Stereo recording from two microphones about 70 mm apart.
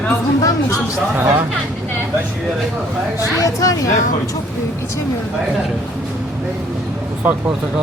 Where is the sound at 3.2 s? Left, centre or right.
Left.